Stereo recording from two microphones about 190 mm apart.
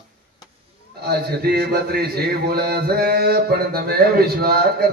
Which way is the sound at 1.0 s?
55° right (ahead or behind).